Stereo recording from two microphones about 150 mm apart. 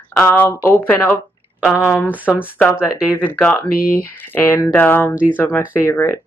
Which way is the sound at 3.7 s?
75° left (ahead or behind).